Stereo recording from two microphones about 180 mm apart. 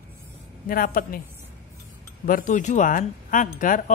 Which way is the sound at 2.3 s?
50° left (ahead or behind).